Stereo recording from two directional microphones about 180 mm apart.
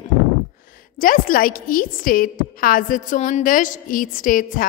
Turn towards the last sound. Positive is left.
turn(degrees=50)  # may be behind; listen again after turning